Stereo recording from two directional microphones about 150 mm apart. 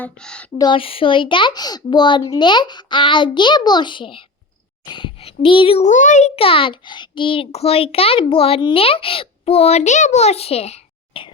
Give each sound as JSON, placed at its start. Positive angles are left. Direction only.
{"t": 0.0, "sound": "speech", "side_deg": 5}
{"t": 0.6, "sound": "a child's voice", "side_deg": 35}